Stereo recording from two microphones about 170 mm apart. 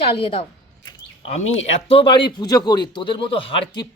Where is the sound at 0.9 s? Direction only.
35° left (ahead or behind).